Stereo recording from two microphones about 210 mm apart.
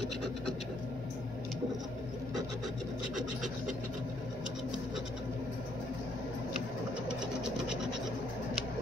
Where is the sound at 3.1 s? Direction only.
35° right (ahead or behind).